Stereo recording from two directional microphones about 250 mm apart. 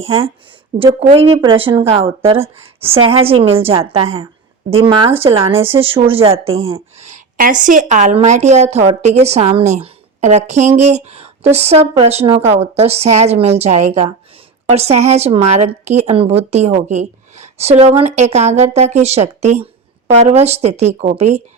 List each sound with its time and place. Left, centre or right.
0.8 s a woman's voice: right